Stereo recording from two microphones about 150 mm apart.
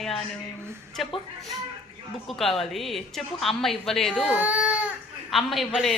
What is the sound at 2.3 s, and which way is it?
Speech, centre (ahead or behind).